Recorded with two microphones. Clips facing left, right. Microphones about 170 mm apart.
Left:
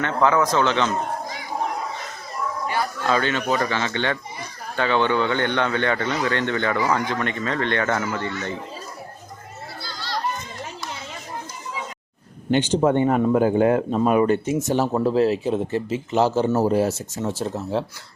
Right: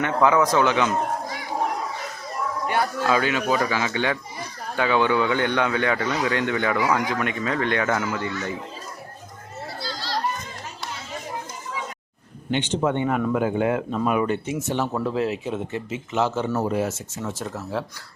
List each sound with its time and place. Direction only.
0.0 s speech: 15° right (ahead or behind)
3.1 s speech: 10° right (ahead or behind)
12.5 s speech: 40° left (ahead or behind)